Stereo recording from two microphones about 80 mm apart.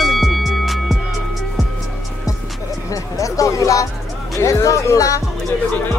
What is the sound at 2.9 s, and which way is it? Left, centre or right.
Speech, left.